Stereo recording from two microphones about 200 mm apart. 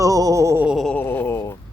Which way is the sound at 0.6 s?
Centre (ahead or behind).